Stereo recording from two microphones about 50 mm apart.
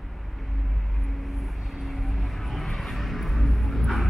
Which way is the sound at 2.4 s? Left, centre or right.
Centre.